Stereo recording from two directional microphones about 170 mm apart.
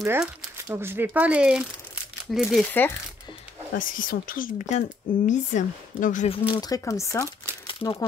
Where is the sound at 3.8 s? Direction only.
55° left (ahead or behind).